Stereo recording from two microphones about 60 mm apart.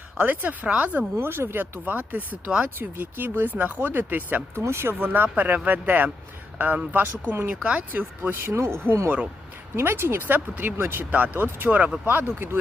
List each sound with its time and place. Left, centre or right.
0.2 s speech: right
1.1 s speech: right
4.6 s speech: right
7.5 s speech: right
11.1 s speech: right